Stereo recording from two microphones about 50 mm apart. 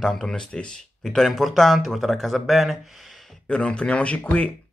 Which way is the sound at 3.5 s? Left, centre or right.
Centre.